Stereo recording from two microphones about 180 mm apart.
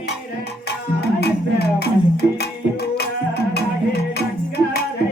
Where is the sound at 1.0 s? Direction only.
65° left (ahead or behind).